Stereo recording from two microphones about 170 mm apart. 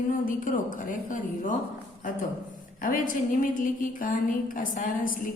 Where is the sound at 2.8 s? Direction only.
50° left (ahead or behind).